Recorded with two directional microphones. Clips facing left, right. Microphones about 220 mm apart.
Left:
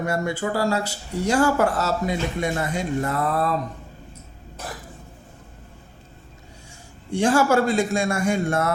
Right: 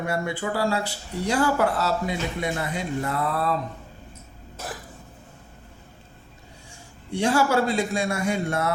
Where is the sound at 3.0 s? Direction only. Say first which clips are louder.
Left 2 dB; 45° left (ahead or behind).